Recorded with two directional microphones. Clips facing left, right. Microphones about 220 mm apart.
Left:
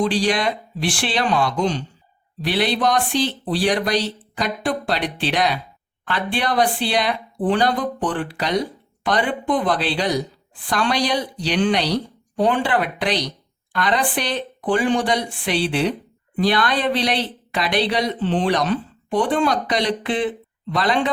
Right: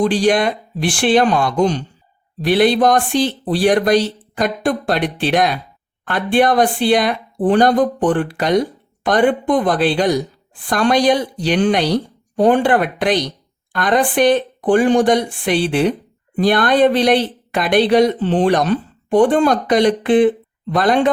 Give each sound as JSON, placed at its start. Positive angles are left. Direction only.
{"t": 0.0, "sound": "speech", "side_deg": -50}